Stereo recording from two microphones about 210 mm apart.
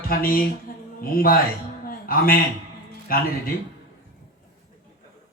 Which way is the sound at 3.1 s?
45° left (ahead or behind).